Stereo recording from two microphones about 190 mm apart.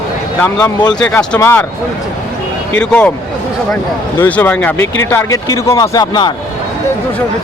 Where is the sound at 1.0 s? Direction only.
5° left (ahead or behind).